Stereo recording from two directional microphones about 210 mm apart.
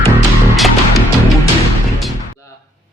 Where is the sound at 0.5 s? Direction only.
Centre (ahead or behind).